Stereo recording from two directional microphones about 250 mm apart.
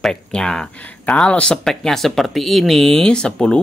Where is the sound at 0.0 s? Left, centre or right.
Centre.